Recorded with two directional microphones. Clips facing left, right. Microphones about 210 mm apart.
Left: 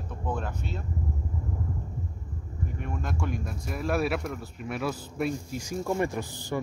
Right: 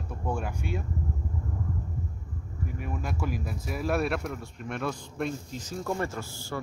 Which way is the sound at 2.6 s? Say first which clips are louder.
Even; 5° right (ahead or behind).